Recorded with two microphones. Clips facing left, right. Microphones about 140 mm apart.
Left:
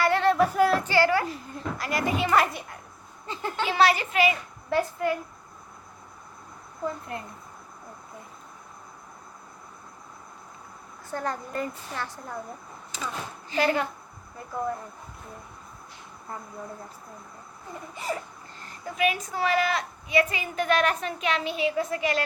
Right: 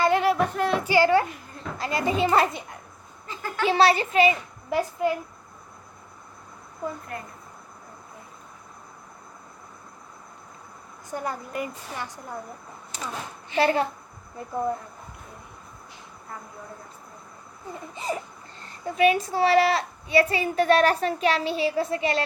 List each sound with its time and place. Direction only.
0.0 s a sound: 15° right (ahead or behind)
0.4 s female singing: 5° left (ahead or behind)
0.9 s a sound: 20° right (ahead or behind)
1.8 s a child's voice: 25° right (ahead or behind)
3.2 s a sound: 25° left (ahead or behind)
3.7 s a child's voice: 30° right (ahead or behind)
11.1 s a woman's voice: 10° right (ahead or behind)
13.6 s a child's voice: 30° right (ahead or behind)
17.9 s a child's voice: 20° right (ahead or behind)